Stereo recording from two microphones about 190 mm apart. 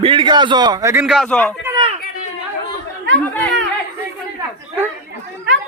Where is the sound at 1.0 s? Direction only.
Centre (ahead or behind).